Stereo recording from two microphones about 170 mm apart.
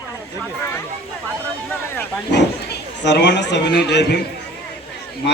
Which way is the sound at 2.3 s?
90° left.